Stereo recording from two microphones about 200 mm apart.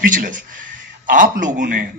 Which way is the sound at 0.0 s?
40° right (ahead or behind).